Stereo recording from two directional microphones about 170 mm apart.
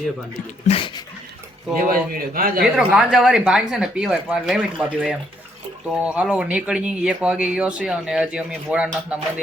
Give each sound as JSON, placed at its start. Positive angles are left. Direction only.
{"t": 0.3, "sound": "speech", "side_deg": 35}
{"t": 1.9, "sound": "a man's voice", "side_deg": -55}
{"t": 2.7, "sound": "speech", "side_deg": -5}